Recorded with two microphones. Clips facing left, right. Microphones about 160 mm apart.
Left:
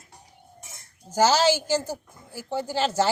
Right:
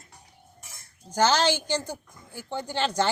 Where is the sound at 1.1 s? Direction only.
10° left (ahead or behind).